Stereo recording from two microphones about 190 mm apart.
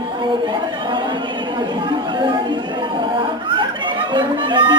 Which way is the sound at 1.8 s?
25° right (ahead or behind).